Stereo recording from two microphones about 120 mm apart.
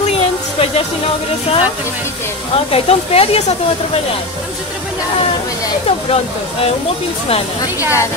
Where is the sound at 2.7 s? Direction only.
55° left (ahead or behind).